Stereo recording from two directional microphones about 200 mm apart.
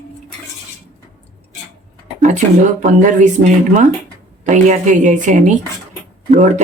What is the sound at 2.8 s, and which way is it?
Speech, 40° right (ahead or behind).